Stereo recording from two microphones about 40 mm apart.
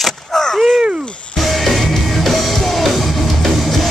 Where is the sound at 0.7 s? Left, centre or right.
Right.